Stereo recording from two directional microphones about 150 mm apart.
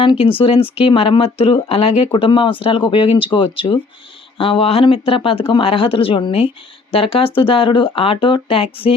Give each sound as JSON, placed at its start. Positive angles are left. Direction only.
{"t": 0.0, "sound": "speech", "side_deg": 35}